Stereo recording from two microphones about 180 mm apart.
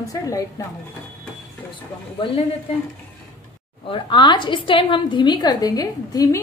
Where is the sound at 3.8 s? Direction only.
25° left (ahead or behind).